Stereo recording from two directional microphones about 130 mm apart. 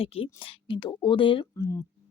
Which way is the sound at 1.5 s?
25° left (ahead or behind).